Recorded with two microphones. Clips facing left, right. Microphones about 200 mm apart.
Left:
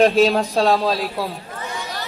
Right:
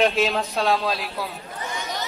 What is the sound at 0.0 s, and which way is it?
A man's voice, 35° left (ahead or behind).